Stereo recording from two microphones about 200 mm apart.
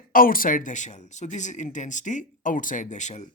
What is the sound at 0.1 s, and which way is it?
Speech, 45° left (ahead or behind).